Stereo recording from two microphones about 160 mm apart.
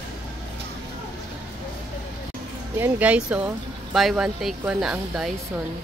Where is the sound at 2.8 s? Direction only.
10° right (ahead or behind).